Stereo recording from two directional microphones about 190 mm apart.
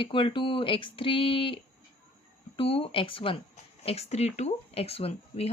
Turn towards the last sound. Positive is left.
turn(degrees=30)  # may be behind; listen again after turning